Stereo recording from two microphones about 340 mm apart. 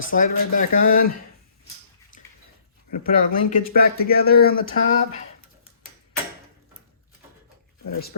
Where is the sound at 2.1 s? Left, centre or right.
Left.